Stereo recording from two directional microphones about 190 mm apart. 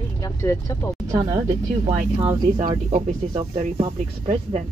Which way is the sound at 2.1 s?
30° right (ahead or behind).